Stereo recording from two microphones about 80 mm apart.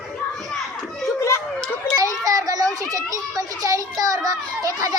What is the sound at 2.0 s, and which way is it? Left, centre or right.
Children playing, right.